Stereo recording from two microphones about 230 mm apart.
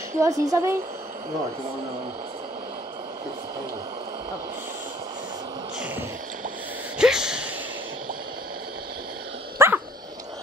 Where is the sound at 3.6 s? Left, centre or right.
Centre.